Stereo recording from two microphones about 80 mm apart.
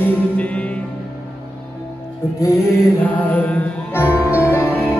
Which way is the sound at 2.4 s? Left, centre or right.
Left.